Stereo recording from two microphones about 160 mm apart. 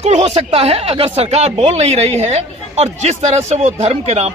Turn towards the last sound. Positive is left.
turn(degrees=-40)  # may be behind; listen again after turning